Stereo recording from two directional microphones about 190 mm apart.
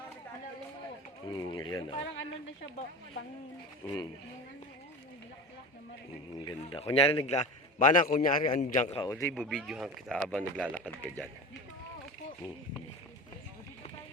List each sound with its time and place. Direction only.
1.3 s speech: 25° left (ahead or behind)
3.8 s speech: 20° left (ahead or behind)
6.4 s a man's voice: 25° left (ahead or behind)
9.0 s speech: 15° left (ahead or behind)
9.3 s speech: 5° left (ahead or behind)